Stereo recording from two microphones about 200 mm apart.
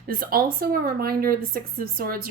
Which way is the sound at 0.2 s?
45° right (ahead or behind).